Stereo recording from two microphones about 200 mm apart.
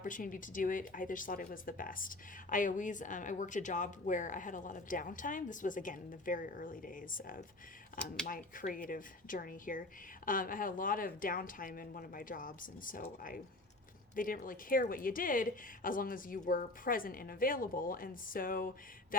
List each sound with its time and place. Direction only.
0.0 s speech: 40° left (ahead or behind)